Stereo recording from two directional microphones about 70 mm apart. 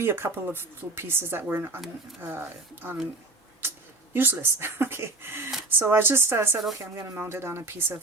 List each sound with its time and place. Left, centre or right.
0.0 s speech: right
4.1 s speech: right